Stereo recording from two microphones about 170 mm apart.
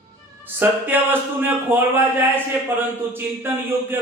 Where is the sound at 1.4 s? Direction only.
10° right (ahead or behind).